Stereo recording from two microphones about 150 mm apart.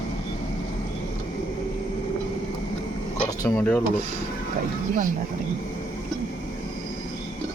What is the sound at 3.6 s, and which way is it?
Speech, 10° left (ahead or behind).